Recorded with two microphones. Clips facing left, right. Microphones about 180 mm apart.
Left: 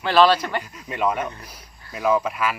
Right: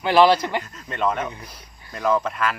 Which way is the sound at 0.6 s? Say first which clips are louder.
Even; 10° left (ahead or behind).